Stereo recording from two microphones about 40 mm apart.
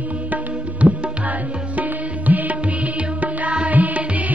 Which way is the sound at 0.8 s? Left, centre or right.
Right.